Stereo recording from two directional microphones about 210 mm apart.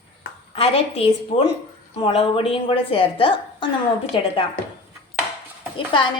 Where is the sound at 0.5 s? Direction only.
25° left (ahead or behind).